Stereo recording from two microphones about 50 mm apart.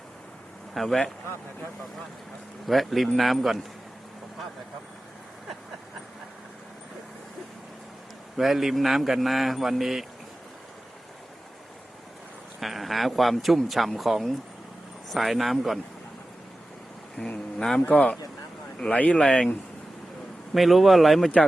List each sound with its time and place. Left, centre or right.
0.7 s speech: centre
2.6 s speech: centre
8.4 s speech: centre
12.5 s speech: centre
17.2 s speech: left
17.6 s speech: centre
17.8 s speech: left
20.5 s speech: centre